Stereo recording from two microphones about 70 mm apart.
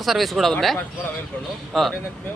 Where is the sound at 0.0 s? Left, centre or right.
Centre.